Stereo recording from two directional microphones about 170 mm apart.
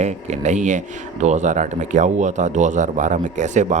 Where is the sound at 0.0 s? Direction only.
45° right (ahead or behind).